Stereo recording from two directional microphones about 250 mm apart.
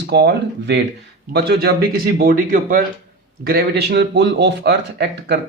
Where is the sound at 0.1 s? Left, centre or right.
Right.